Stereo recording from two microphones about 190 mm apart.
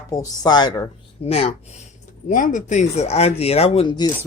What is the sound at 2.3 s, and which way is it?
Speech, 45° left (ahead or behind).